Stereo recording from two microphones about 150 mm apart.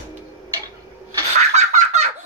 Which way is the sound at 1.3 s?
50° right (ahead or behind).